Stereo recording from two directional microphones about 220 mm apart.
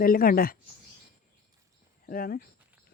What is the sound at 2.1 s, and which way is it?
Speech, 40° left (ahead or behind).